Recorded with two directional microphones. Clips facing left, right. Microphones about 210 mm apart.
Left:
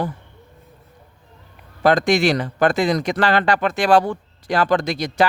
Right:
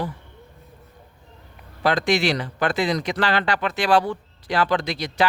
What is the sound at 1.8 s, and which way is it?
Speech, 45° left (ahead or behind).